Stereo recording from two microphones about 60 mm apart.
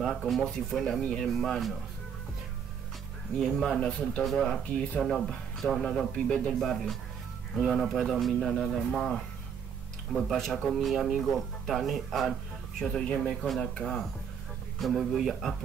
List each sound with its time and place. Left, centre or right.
0.0 s speech: centre
3.3 s speech: centre
4.2 s speech: centre
4.5 s speech: left
5.0 s speech: centre
6.7 s speech: centre
14.8 s speech: centre